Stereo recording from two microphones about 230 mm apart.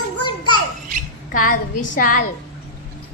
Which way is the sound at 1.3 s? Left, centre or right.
Left.